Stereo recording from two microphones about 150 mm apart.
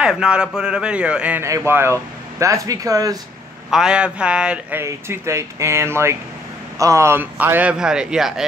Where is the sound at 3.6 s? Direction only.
5° right (ahead or behind).